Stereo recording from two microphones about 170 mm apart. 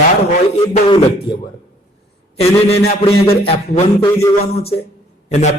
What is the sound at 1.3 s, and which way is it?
A man's voice, 30° left (ahead or behind).